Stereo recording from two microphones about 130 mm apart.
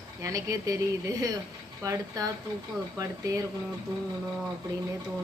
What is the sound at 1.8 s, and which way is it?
Speech, 25° right (ahead or behind).